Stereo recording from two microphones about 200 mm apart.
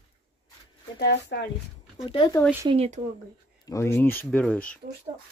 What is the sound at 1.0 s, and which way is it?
Speech, 55° left (ahead or behind).